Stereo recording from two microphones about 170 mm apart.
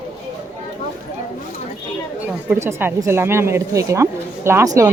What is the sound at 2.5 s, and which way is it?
Speech, 15° right (ahead or behind).